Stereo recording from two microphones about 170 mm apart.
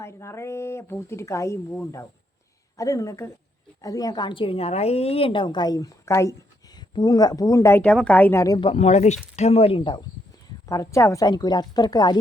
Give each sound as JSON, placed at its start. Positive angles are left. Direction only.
{"t": 0.0, "sound": "a woman's voice", "side_deg": 15}
{"t": 8.7, "sound": "speech", "side_deg": 40}
{"t": 10.7, "sound": "a woman's voice", "side_deg": 20}